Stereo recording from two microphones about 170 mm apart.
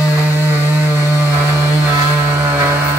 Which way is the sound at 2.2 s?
10° right (ahead or behind).